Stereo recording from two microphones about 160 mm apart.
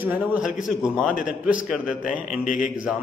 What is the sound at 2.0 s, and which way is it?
Speech, 55° left (ahead or behind).